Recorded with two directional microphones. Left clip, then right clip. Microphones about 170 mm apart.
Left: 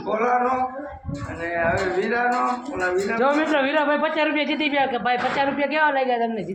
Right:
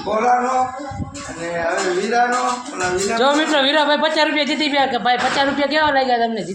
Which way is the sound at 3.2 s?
15° right (ahead or behind).